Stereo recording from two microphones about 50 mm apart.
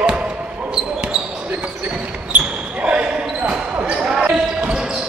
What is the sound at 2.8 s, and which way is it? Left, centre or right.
Basketball bounce, right.